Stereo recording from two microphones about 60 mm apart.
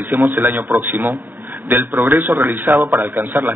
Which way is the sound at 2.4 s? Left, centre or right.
Right.